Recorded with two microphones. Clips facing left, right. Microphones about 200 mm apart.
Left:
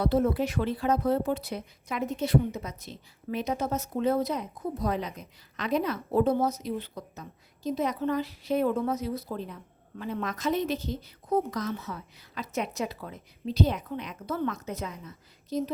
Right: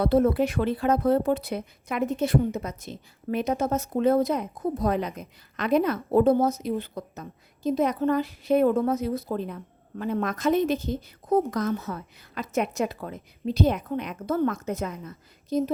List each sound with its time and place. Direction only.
0.0 s speech: 55° right (ahead or behind)